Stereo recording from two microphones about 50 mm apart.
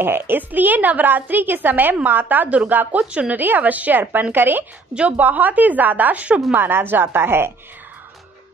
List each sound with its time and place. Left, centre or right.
0.0 s a woman's voice: right
3.1 s speech: right
3.3 s a woman's voice: right
4.9 s a woman's voice: right
6.5 s a woman's voice: right